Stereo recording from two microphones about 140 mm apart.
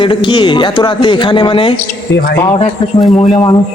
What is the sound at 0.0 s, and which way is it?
Speech, 35° left (ahead or behind).